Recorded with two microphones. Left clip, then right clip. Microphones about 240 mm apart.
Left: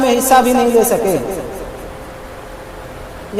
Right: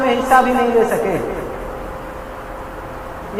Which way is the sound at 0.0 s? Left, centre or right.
Left.